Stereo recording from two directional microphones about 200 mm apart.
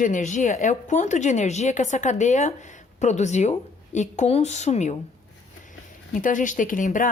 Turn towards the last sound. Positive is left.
turn(degrees=40)  # may be behind; listen again after turning